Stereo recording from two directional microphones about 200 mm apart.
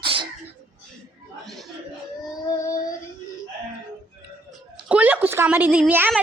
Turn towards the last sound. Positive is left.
turn(degrees=-10)  # may be behind; listen again after turning